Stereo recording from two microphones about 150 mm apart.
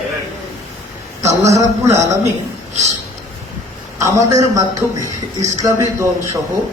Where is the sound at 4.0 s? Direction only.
20° right (ahead or behind).